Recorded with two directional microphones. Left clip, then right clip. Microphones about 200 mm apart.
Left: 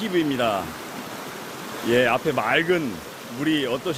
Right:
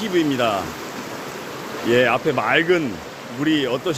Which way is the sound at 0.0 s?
15° left (ahead or behind).